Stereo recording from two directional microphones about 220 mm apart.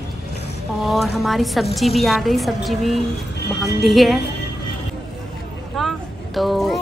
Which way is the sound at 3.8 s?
Centre (ahead or behind).